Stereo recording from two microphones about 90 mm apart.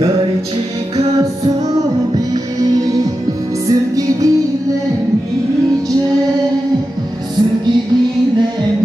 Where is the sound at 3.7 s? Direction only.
40° right (ahead or behind).